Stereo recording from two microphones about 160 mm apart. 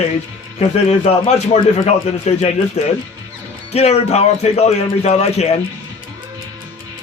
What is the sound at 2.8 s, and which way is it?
A man's voice, 45° left (ahead or behind).